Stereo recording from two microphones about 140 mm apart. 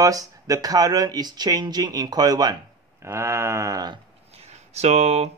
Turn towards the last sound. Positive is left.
turn(degrees=-45)  # may be behind; listen again after turning